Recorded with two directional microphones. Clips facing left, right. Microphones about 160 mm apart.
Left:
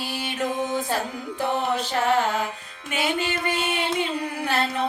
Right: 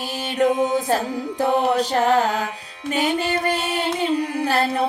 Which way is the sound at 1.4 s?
35° right (ahead or behind).